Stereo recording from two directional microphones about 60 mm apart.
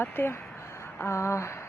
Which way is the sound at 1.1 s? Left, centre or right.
Left.